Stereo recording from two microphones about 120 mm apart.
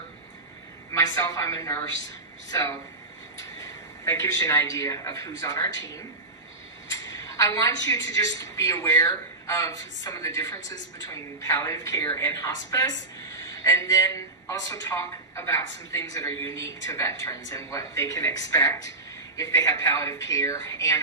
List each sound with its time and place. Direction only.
0.9 s a woman's voice: 25° left (ahead or behind)